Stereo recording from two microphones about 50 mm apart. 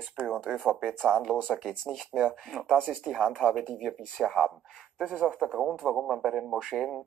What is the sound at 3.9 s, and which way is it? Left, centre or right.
Speech, centre.